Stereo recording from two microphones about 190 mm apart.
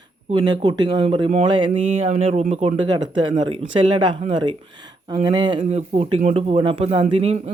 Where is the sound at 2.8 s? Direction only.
25° right (ahead or behind).